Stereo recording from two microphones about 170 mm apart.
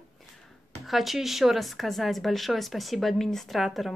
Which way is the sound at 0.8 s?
Centre (ahead or behind).